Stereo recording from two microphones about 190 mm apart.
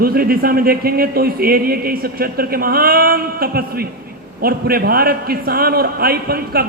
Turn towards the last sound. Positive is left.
turn(degrees=-55)  # may be behind; listen again after turning